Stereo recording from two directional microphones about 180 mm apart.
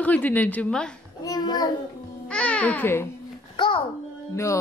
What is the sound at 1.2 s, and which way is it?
Child singing, 20° left (ahead or behind).